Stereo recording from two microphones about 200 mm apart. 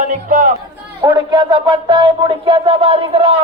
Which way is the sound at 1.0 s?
20° right (ahead or behind).